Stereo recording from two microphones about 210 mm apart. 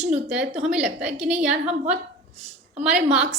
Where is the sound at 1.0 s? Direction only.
30° right (ahead or behind).